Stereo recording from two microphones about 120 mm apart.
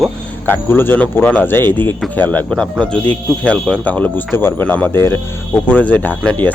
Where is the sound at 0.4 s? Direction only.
20° left (ahead or behind).